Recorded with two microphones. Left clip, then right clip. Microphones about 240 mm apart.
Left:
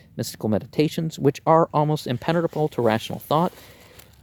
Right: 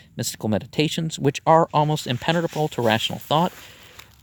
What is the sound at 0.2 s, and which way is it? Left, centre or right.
Speech, right.